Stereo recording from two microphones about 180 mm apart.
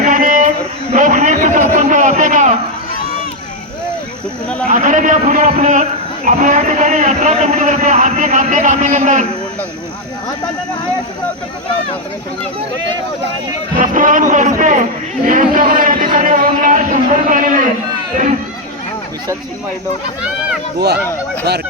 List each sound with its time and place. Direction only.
0.0 s a sound: 45° right (ahead or behind)
4.7 s a man's voice: 45° right (ahead or behind)
13.7 s a man's voice: 45° right (ahead or behind)
20.7 s speech: 65° right (ahead or behind)